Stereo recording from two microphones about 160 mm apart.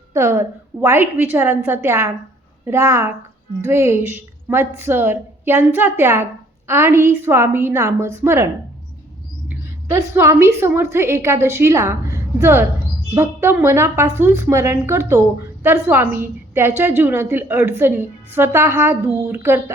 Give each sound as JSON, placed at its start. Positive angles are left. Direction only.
{"t": 0.1, "sound": "a woman's voice", "side_deg": -15}
{"t": 9.5, "sound": "mouse", "side_deg": -15}
{"t": 10.2, "sound": "a woman's voice", "side_deg": -15}